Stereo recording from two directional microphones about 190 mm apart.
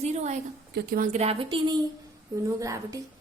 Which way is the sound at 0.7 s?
50° right (ahead or behind).